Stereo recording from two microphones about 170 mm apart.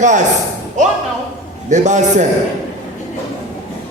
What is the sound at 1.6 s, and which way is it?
Speech, 45° right (ahead or behind).